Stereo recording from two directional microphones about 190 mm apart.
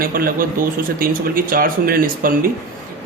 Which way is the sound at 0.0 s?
50° right (ahead or behind).